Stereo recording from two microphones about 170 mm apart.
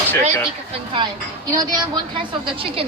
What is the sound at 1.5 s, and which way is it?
A woman's voice, 20° right (ahead or behind).